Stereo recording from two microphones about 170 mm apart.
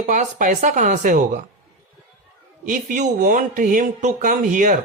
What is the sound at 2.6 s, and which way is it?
Speech, 50° right (ahead or behind).